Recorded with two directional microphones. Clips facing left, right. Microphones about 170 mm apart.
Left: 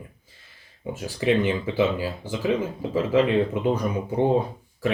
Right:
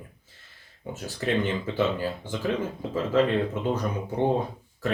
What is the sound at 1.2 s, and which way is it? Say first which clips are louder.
Speech: left 4 dB; 10° left (ahead or behind).